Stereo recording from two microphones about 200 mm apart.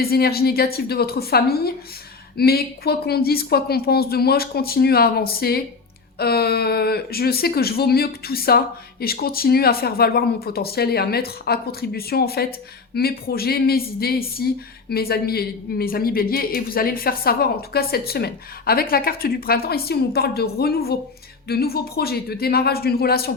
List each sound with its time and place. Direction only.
0.0 s speech: 50° left (ahead or behind)